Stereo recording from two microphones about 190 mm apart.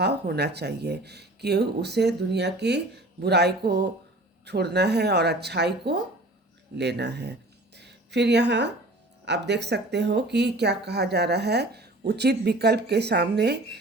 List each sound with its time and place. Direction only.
0.0 s speech: 60° right (ahead or behind)